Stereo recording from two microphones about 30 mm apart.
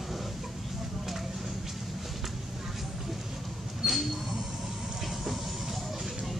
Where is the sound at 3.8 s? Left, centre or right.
Centre.